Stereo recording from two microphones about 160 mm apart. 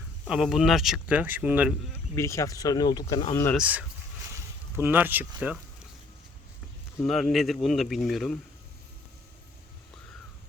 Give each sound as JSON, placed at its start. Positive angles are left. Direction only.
{"t": 0.3, "sound": "speech", "side_deg": -5}
{"t": 2.1, "sound": "speech", "side_deg": 20}
{"t": 3.5, "sound": "speech", "side_deg": -10}
{"t": 4.4, "sound": "a sound", "side_deg": -15}
{"t": 5.4, "sound": "speech", "side_deg": -5}
{"t": 7.0, "sound": "speech", "side_deg": 0}